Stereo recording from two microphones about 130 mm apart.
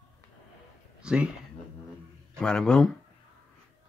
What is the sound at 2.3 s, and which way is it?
Speech, 5° left (ahead or behind).